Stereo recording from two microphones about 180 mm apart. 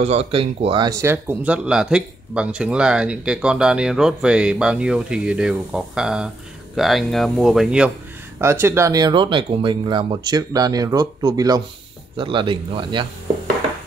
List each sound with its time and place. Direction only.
0.0 s speech: 35° right (ahead or behind)